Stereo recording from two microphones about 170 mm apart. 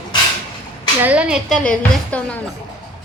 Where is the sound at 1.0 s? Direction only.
5° right (ahead or behind).